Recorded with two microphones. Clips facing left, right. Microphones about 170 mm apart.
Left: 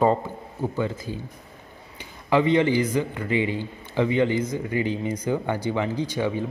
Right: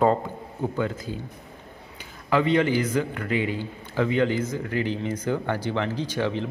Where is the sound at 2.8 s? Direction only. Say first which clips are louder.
Left 1 dB; 10° left (ahead or behind).